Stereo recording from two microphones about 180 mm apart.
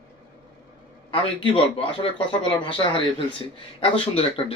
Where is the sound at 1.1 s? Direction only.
30° left (ahead or behind).